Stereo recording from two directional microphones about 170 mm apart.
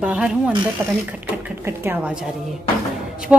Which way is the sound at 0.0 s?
5° right (ahead or behind).